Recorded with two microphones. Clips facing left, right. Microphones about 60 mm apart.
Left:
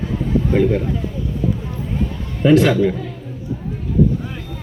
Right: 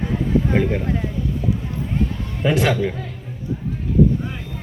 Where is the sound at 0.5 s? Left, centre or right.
Centre.